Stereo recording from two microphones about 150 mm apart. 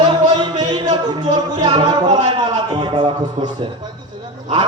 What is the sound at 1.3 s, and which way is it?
Music, 25° right (ahead or behind).